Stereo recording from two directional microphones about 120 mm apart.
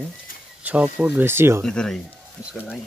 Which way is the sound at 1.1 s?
20° right (ahead or behind).